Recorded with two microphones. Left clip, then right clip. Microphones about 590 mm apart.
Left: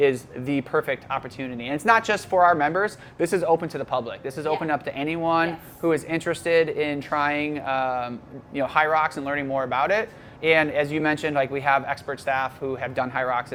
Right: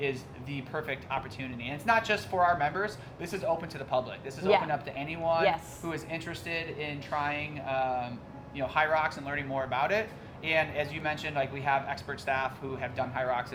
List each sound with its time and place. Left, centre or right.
0.0 s speech: left